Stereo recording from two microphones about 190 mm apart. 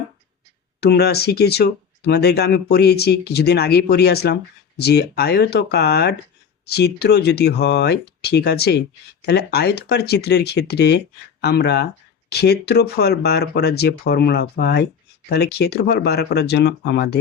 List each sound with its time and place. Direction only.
0.8 s speech: 60° left (ahead or behind)